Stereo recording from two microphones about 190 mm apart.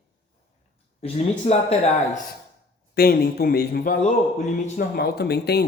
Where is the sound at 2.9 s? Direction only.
55° left (ahead or behind).